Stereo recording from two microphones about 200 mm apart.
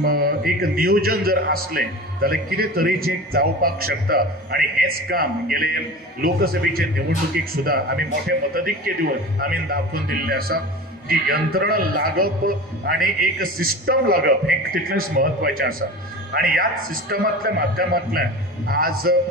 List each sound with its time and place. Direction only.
0.0 s a man's voice: 50° right (ahead or behind)